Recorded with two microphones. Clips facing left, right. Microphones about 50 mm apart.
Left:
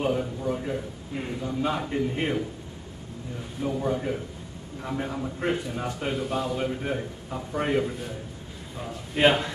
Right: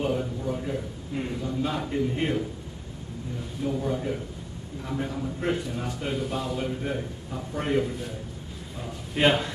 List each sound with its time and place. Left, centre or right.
0.0 s a man's voice: centre
3.6 s a man's voice: centre
9.1 s a man's voice: centre